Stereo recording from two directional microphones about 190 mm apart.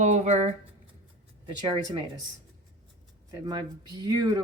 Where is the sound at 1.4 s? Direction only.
25° right (ahead or behind).